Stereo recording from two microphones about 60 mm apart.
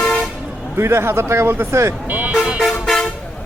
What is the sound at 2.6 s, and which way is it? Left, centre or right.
Toot, centre.